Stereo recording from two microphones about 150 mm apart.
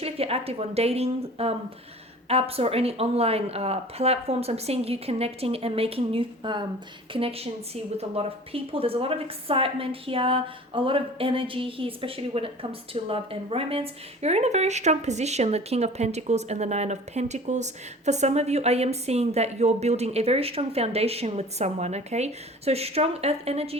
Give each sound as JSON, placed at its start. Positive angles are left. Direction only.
{"t": 0.0, "sound": "a woman's voice", "side_deg": -40}